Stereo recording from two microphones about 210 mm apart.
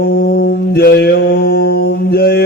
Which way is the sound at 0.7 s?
50° left (ahead or behind).